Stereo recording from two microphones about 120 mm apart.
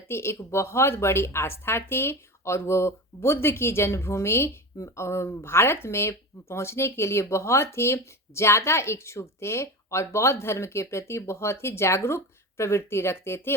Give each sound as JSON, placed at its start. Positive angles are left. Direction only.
{"t": 0.1, "sound": "speech", "side_deg": 20}